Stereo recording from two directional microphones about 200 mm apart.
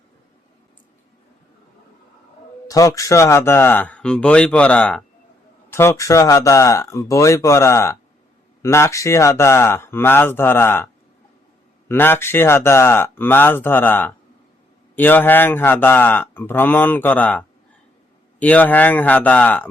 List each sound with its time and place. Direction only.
2.6 s speech: 15° left (ahead or behind)
11.9 s speech: 10° left (ahead or behind)